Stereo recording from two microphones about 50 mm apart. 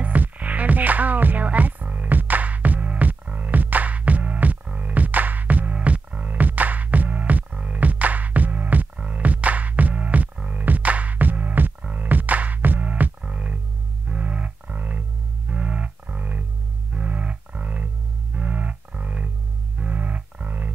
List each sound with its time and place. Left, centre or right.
0.0 s music: right
13.2 s music: right
16.9 s a sound: right